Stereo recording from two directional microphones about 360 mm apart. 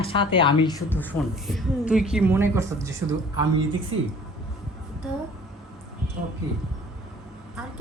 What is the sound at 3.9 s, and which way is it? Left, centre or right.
Speech, right.